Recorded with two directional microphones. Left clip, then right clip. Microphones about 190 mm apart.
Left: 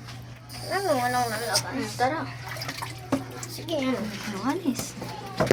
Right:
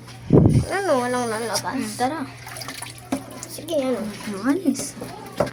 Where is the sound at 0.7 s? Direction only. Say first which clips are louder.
Right 4 dB; 50° right (ahead or behind).